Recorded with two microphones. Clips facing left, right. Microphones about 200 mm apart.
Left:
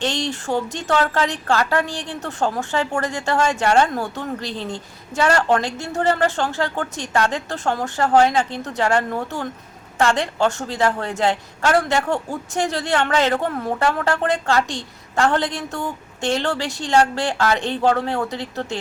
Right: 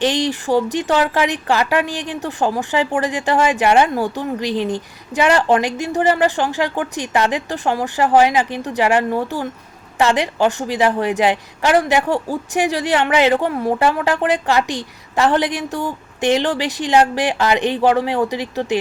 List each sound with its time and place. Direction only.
0.0 s a woman's voice: 15° right (ahead or behind)